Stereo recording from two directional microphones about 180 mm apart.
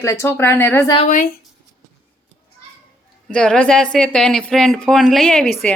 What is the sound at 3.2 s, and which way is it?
A woman's voice, 5° left (ahead or behind).